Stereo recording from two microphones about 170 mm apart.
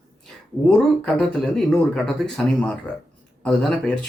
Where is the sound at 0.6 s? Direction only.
5° left (ahead or behind).